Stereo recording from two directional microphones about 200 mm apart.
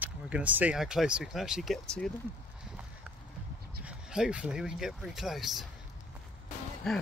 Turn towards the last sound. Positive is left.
turn(degrees=0)  # may be behind; listen again after turning